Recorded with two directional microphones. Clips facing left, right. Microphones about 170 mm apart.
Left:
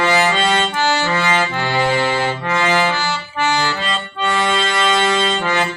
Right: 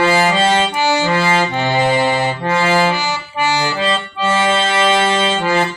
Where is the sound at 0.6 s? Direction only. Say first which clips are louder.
Right 2 dB; 15° right (ahead or behind).